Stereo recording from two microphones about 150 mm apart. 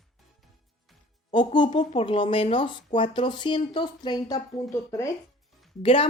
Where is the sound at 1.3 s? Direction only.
30° left (ahead or behind).